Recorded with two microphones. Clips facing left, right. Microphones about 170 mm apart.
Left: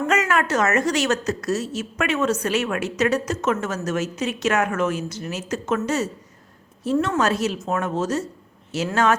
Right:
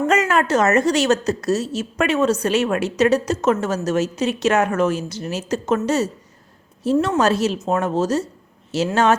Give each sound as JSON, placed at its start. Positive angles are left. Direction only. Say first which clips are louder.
{"t": 0.1, "sound": "a woman's voice", "louder": "right 2 dB", "side_deg": -30}
{"t": 7.2, "sound": "a woman's voice", "louder": "right 4 dB", "side_deg": -30}